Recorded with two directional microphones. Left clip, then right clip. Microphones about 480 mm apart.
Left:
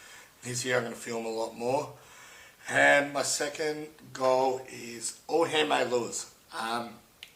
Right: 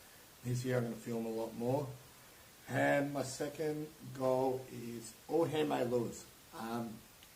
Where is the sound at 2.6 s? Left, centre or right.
Centre.